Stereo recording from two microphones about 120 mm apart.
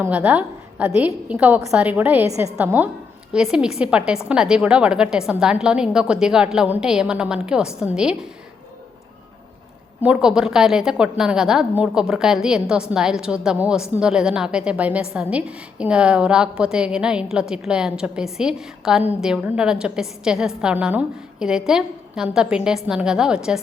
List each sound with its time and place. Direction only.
0.0 s a woman's voice: 15° right (ahead or behind)
10.0 s a woman's voice: 10° right (ahead or behind)